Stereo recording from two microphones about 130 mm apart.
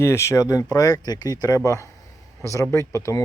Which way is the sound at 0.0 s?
20° left (ahead or behind).